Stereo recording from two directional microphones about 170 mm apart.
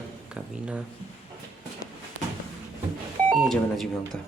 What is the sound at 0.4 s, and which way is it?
Speech, 5° right (ahead or behind).